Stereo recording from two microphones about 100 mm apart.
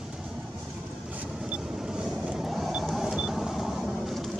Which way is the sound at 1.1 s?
10° right (ahead or behind).